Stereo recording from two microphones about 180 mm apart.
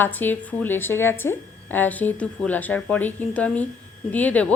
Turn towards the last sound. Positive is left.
turn(degrees=10)  # may be behind; listen again after turning